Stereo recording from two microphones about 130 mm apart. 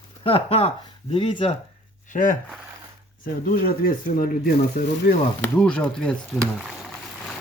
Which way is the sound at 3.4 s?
90° left.